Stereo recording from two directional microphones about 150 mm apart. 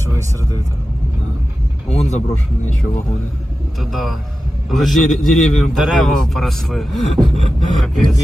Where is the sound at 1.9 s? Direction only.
45° left (ahead or behind).